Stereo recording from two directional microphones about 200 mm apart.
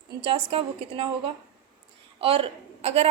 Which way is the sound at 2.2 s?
25° right (ahead or behind).